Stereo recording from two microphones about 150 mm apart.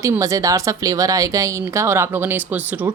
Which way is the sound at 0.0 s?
20° right (ahead or behind).